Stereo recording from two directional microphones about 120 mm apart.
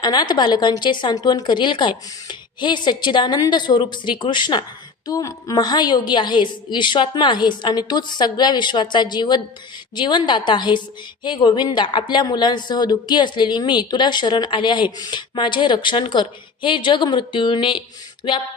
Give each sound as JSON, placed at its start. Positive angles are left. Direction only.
{"t": 0.0, "sound": "a woman's voice", "side_deg": 35}